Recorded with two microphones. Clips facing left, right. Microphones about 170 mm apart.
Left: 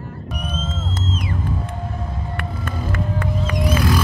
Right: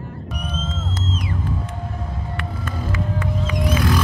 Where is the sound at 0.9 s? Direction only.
55° left (ahead or behind).